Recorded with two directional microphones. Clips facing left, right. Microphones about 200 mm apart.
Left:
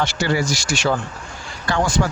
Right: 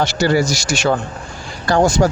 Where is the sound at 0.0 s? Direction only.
40° right (ahead or behind).